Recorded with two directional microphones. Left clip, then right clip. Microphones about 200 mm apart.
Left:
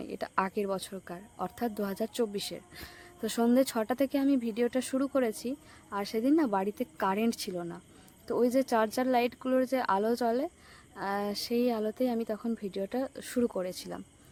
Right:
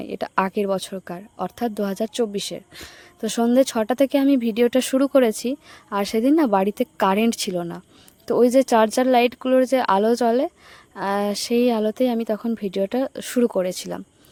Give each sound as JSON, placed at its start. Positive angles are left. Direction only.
{"t": 0.0, "sound": "a woman's voice", "side_deg": -35}